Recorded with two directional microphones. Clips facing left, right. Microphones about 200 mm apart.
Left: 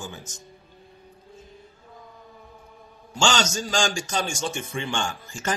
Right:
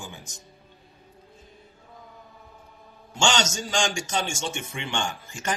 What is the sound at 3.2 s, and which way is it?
A man's voice, 20° right (ahead or behind).